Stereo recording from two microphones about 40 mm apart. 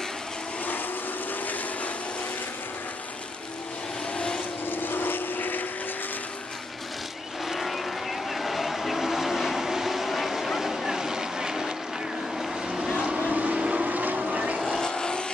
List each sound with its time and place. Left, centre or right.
4.6 s vehicle: left
7.4 s vehicle: centre
13.0 s vehicle: right
13.8 s vehicle: right
14.6 s vehicle: centre